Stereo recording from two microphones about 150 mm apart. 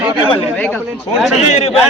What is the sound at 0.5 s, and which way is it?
Speech, 10° left (ahead or behind).